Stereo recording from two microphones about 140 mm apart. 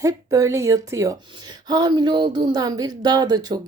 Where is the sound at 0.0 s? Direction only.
20° right (ahead or behind).